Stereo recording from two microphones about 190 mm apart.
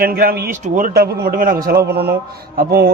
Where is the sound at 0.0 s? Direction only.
50° right (ahead or behind).